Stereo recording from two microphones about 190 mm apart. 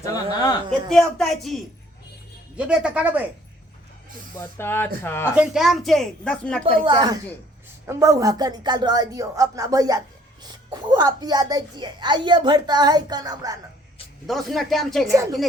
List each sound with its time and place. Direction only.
0.0 s a sound: 20° left (ahead or behind)
0.7 s a woman's voice: centre (ahead or behind)
2.6 s a woman's voice: 5° right (ahead or behind)
4.4 s speech: 10° left (ahead or behind)
5.3 s a woman's voice: 5° right (ahead or behind)
6.8 s a child's voice: 25° right (ahead or behind)
14.3 s a woman's voice: centre (ahead or behind)